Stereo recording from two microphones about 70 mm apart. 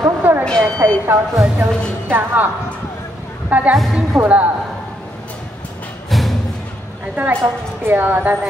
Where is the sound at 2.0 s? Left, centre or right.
Right.